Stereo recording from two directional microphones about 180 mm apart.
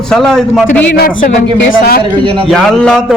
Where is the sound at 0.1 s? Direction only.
5° left (ahead or behind).